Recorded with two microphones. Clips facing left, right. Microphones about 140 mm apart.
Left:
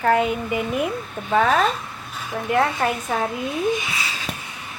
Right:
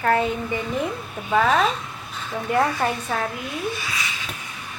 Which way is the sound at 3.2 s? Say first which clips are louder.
Left 4 dB; 20° left (ahead or behind).